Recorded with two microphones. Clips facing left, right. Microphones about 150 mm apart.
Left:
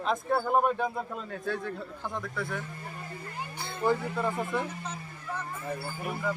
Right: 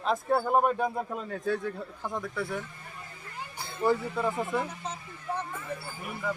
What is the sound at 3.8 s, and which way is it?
Speech, 5° right (ahead or behind).